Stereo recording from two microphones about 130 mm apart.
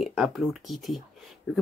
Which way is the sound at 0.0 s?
5° right (ahead or behind).